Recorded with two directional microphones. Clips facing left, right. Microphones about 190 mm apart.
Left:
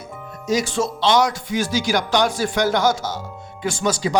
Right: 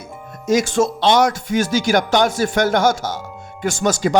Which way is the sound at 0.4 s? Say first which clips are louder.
Right 5 dB; 45° right (ahead or behind).